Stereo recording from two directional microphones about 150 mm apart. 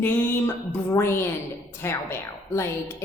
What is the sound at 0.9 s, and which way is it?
A woman's voice, 15° left (ahead or behind).